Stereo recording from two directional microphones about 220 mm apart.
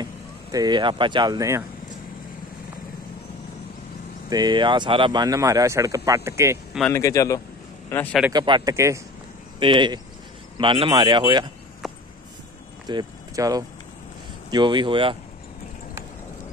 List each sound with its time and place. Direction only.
0.0 s speech: 15° right (ahead or behind)
4.3 s speech: 20° right (ahead or behind)
6.9 s speech: 15° left (ahead or behind)
8.3 s speech: 20° right (ahead or behind)
11.8 s a sound: centre (ahead or behind)
12.8 s speech: 15° right (ahead or behind)